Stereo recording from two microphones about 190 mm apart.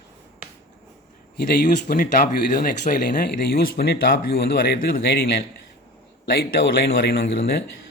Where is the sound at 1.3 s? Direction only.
50° left (ahead or behind).